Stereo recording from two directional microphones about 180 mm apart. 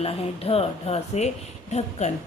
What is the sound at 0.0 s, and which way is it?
Speech, 35° left (ahead or behind).